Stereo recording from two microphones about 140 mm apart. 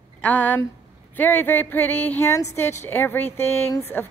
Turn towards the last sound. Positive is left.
turn(degrees=15)  # may be behind; listen again after turning